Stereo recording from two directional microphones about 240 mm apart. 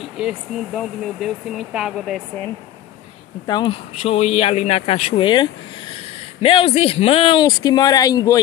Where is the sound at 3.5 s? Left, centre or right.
Centre.